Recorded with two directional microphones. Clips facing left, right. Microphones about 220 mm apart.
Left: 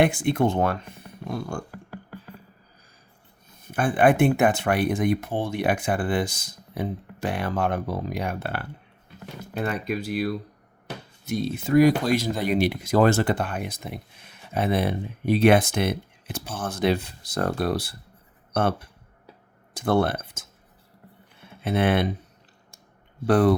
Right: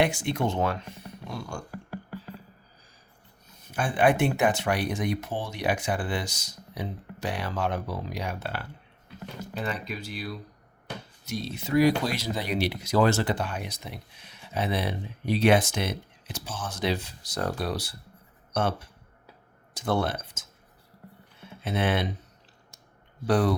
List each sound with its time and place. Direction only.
0.0 s speech: 55° left (ahead or behind)
3.7 s speech: 55° left (ahead or behind)
21.6 s speech: 55° left (ahead or behind)
23.2 s speech: 55° left (ahead or behind)